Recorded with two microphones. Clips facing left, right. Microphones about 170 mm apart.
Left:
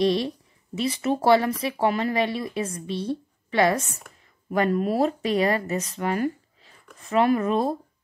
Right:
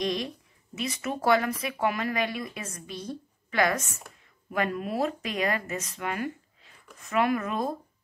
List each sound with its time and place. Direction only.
0.0 s speech: 30° left (ahead or behind)